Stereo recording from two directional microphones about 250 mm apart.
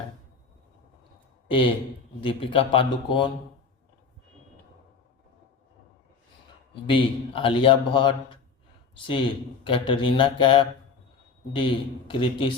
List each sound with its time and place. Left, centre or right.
1.5 s a man's voice: left
6.8 s a man's voice: left
9.6 s a man's voice: left